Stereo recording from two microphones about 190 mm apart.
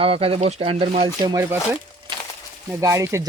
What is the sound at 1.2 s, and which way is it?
Speech, 15° right (ahead or behind).